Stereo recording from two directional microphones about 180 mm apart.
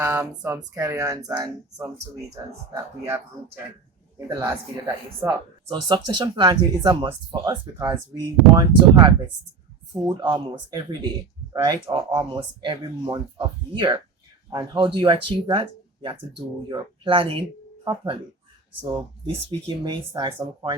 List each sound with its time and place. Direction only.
0.0 s speech: 15° right (ahead or behind)
2.3 s speech: 20° right (ahead or behind)
4.3 s speech: 15° right (ahead or behind)
5.6 s speech: 25° right (ahead or behind)
19.2 s speech: 25° right (ahead or behind)